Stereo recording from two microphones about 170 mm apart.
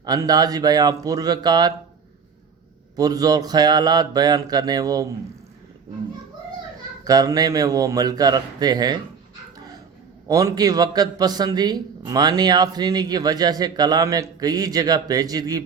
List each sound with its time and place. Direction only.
0.0 s a man's voice: 20° right (ahead or behind)
2.9 s a man's voice: 20° right (ahead or behind)
7.0 s a man's voice: 20° right (ahead or behind)
10.2 s a man's voice: 20° right (ahead or behind)